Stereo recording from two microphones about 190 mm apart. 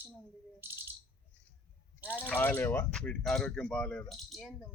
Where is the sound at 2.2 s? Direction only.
10° left (ahead or behind).